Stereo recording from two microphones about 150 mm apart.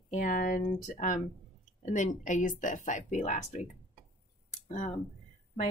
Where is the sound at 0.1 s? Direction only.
60° left (ahead or behind).